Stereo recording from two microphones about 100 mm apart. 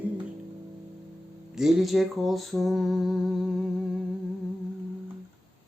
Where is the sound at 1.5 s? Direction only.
5° right (ahead or behind).